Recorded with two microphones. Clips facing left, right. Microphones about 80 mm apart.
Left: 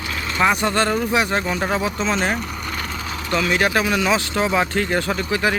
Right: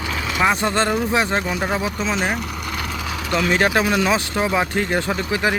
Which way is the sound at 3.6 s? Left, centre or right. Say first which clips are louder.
Right 1 dB; right.